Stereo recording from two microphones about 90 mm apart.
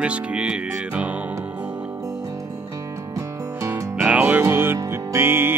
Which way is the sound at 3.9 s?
10° right (ahead or behind).